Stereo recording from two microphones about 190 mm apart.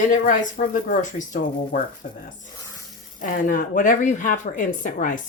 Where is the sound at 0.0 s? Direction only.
45° left (ahead or behind).